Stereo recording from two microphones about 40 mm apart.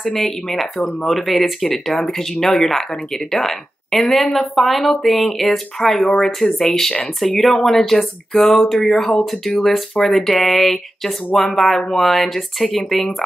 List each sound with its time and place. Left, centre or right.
0.0 s speech: centre